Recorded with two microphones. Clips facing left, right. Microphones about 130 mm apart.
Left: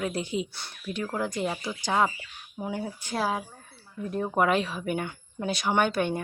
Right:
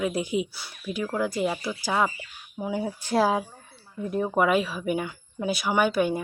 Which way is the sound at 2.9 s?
35° right (ahead or behind).